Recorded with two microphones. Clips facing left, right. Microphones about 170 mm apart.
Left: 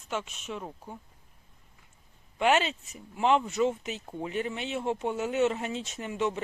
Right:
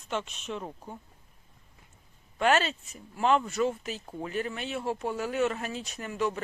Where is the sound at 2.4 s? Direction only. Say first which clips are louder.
Even; 15° left (ahead or behind).